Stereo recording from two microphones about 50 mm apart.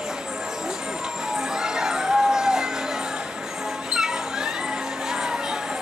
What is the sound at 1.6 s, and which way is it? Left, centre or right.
Music, centre.